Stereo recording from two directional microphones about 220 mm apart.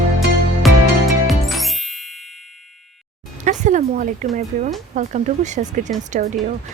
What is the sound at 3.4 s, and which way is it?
Speech, 35° right (ahead or behind).